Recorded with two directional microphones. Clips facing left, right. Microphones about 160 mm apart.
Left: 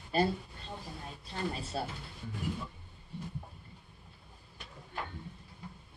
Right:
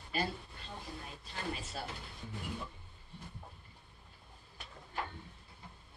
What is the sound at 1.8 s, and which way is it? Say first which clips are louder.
Speech: left 6 dB; 30° left (ahead or behind).